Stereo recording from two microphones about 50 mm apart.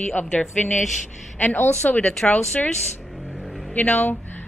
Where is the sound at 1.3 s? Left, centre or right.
Left.